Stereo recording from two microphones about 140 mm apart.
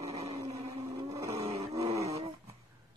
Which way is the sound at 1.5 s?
45° right (ahead or behind).